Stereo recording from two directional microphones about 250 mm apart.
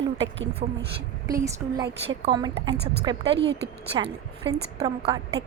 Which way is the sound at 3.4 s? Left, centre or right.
Right.